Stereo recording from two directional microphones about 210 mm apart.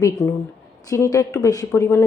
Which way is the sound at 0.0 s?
15° left (ahead or behind).